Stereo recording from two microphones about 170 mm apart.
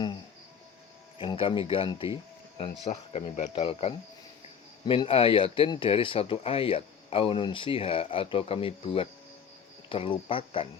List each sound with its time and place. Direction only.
1.2 s speech: 30° left (ahead or behind)